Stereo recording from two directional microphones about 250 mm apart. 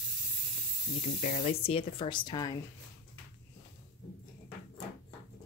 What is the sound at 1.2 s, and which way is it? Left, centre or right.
Speech, left.